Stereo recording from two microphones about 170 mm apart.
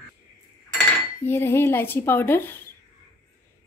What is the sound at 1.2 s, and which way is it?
Speech, 15° left (ahead or behind).